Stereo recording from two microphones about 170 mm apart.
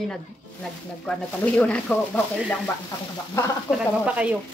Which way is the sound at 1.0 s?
5° left (ahead or behind).